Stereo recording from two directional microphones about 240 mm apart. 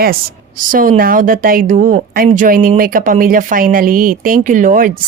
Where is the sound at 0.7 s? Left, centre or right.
Right.